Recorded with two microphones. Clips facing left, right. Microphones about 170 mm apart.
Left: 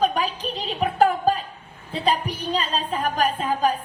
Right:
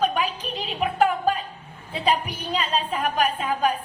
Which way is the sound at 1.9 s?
10° right (ahead or behind).